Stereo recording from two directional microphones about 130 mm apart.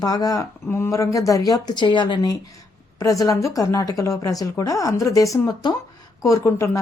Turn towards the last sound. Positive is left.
turn(degrees=20)  # may be behind; listen again after turning